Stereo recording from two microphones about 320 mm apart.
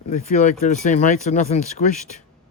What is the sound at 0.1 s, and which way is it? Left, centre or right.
Speech, left.